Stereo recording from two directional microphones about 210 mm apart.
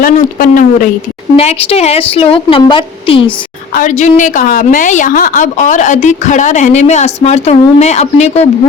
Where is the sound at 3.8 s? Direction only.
35° left (ahead or behind).